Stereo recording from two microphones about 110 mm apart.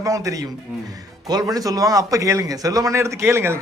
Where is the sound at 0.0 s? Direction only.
30° right (ahead or behind).